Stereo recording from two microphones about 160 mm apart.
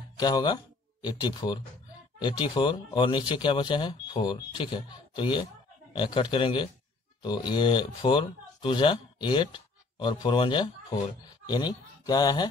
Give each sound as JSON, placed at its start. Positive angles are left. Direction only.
{"t": 0.2, "sound": "a man's voice", "side_deg": 25}